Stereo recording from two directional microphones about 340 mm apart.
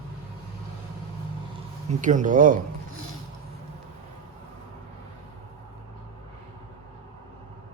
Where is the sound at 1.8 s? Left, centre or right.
Right.